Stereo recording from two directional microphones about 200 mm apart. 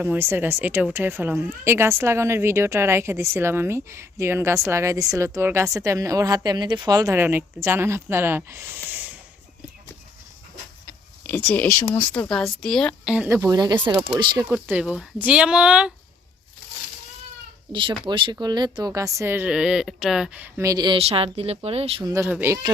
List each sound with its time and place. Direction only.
0.0 s speech: 10° right (ahead or behind)
8.9 s a sound: 10° right (ahead or behind)
11.3 s speech: 5° left (ahead or behind); by 14.4 s 25° right (ahead or behind)
14.5 s speech: 5° right (ahead or behind)
17.7 s speech: 25° right (ahead or behind)
22.1 s speech: 10° right (ahead or behind)